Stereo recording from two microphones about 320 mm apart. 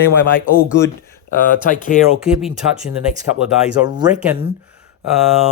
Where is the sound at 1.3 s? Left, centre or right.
Left.